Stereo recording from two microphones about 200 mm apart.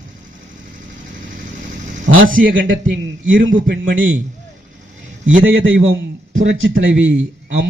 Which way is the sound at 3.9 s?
40° right (ahead or behind).